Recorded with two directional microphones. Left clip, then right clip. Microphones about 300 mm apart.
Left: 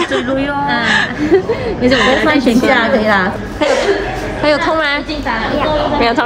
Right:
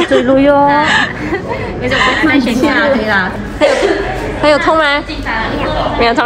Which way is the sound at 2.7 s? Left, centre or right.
Left.